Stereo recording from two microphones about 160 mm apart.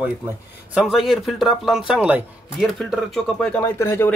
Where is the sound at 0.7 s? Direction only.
Centre (ahead or behind).